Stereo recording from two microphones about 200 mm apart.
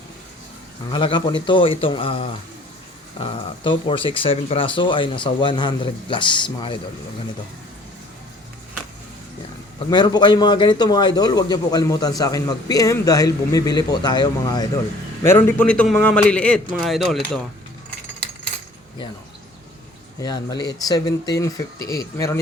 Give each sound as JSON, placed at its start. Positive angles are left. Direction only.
{"t": 0.9, "sound": "a man's voice", "side_deg": 25}
{"t": 9.9, "sound": "a man's voice", "side_deg": 20}
{"t": 20.1, "sound": "a man's voice", "side_deg": 20}